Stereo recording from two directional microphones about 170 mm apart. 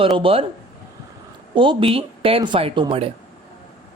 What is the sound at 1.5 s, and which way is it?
Speech, 30° right (ahead or behind).